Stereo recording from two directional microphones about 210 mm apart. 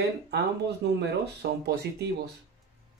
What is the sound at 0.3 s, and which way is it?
Speech, 50° right (ahead or behind).